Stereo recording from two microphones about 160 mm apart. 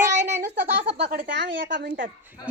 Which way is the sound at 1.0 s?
80° right.